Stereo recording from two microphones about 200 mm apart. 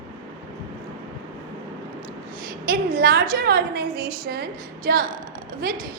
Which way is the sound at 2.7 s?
50° right (ahead or behind).